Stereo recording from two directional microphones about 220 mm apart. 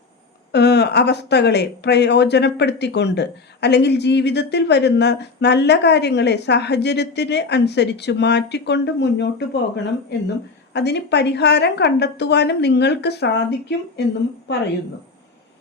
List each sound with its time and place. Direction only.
0.5 s speech: 50° left (ahead or behind)